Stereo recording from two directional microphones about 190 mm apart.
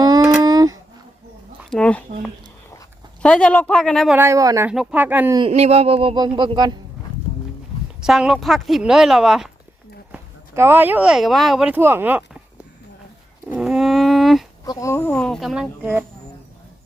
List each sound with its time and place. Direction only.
0.4 s a sound: 20° right (ahead or behind)
1.7 s speech: 5° left (ahead or behind)
3.2 s speech: 5° left (ahead or behind)
4.2 s speech: 15° right (ahead or behind)
4.7 s speech: 5° right (ahead or behind)
5.4 s speech: 35° right (ahead or behind)
8.0 s speech: centre (ahead or behind)
10.1 s speech: 15° right (ahead or behind)
13.5 s a sound: 5° right (ahead or behind)
14.6 s speech: 15° left (ahead or behind)
15.1 s speech: 5° left (ahead or behind)
15.8 s speech: 10° right (ahead or behind)